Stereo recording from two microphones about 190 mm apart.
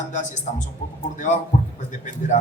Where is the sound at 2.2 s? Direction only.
45° left (ahead or behind).